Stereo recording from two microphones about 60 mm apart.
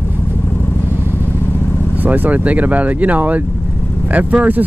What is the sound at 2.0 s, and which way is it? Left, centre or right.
Speech, right.